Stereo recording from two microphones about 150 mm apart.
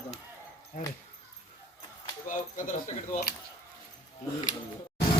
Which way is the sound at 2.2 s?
60° left (ahead or behind).